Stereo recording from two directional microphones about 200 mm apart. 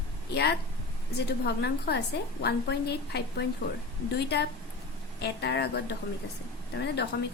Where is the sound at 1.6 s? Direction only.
55° left (ahead or behind).